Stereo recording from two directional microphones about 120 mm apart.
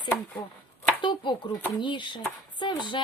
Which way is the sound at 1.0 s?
40° left (ahead or behind).